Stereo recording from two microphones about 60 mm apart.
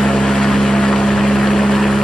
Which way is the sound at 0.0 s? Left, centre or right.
Centre.